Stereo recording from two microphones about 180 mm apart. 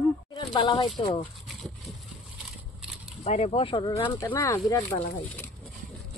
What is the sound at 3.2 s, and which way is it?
Speech, 35° left (ahead or behind).